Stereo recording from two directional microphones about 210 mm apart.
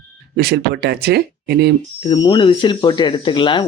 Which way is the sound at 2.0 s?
20° left (ahead or behind).